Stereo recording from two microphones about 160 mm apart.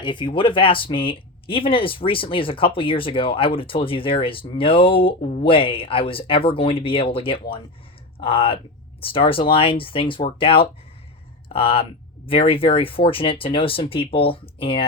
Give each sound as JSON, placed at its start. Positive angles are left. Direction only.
{"t": 0.0, "sound": "speech", "side_deg": 30}